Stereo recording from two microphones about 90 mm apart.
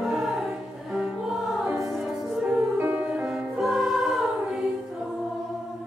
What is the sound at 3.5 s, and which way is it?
Choir, 5° right (ahead or behind).